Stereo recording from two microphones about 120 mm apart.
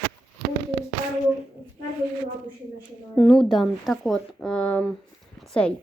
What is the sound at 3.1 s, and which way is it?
Speech, centre (ahead or behind).